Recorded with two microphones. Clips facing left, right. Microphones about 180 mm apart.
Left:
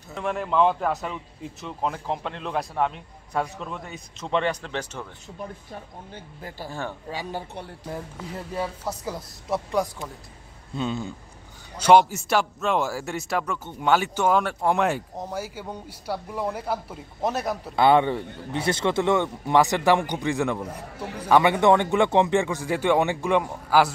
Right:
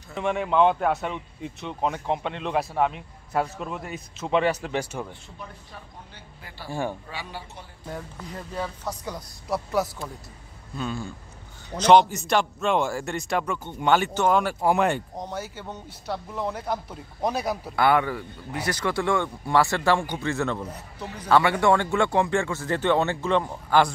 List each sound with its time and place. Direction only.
0.1 s a man's voice: centre (ahead or behind)
5.4 s speech: 45° left (ahead or behind)
6.7 s speech: 15° right (ahead or behind)
7.1 s speech: 40° left (ahead or behind)
7.9 s a man's voice: 5° left (ahead or behind)
10.7 s speech: 25° left (ahead or behind)
11.8 s a man's voice: 10° left (ahead or behind)
17.7 s speech: 25° left (ahead or behind); by 23.9 s 5° left (ahead or behind)